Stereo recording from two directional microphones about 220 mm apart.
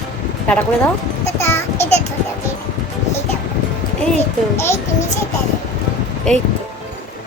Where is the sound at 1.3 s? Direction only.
10° left (ahead or behind).